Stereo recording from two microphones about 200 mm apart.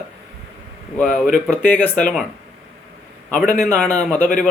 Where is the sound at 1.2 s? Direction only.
Centre (ahead or behind).